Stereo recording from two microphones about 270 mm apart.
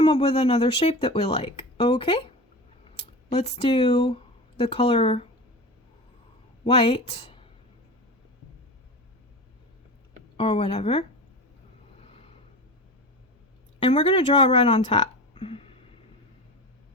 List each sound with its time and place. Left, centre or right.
0.0 s speech: left
3.2 s speech: left
6.7 s speech: left
10.3 s speech: left
13.7 s speech: centre